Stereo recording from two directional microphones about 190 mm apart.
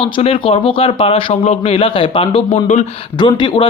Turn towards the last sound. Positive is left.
turn(degrees=25)  # may be behind; listen again after turning